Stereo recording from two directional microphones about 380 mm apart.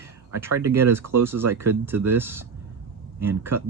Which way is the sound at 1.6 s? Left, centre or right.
Centre.